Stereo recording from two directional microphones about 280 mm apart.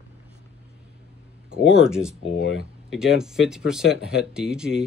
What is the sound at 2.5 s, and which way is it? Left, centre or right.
Speech, centre.